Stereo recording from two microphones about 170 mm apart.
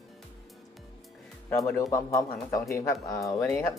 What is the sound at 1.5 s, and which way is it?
Speech, 15° left (ahead or behind).